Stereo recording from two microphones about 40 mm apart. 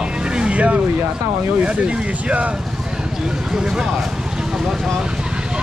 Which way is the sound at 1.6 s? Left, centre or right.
Right.